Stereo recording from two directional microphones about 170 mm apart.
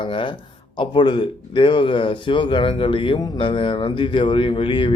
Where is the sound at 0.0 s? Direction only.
30° left (ahead or behind).